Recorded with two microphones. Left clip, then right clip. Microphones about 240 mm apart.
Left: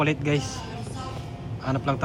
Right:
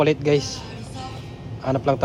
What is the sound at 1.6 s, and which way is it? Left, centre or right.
Speech, right.